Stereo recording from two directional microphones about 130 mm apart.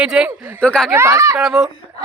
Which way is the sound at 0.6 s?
5° left (ahead or behind).